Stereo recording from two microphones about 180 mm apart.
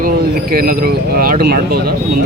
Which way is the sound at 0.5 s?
55° right (ahead or behind).